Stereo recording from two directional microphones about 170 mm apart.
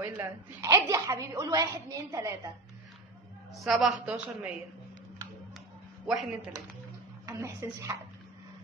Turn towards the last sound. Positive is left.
turn(degrees=-15)  # may be behind; listen again after turning